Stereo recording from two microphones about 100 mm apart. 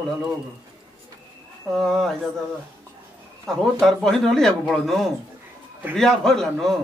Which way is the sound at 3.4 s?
Centre (ahead or behind).